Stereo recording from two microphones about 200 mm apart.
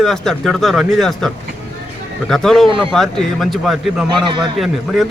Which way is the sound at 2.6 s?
25° right (ahead or behind).